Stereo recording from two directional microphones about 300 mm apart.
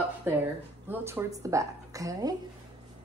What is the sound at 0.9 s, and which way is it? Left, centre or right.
A woman's voice, centre.